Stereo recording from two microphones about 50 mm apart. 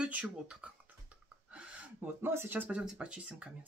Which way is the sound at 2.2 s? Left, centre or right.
Right.